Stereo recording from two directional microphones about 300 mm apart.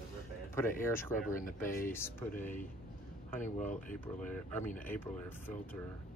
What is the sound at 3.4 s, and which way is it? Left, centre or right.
Speech, left.